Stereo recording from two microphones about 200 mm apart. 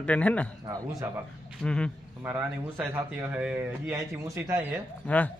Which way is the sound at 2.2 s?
10° right (ahead or behind).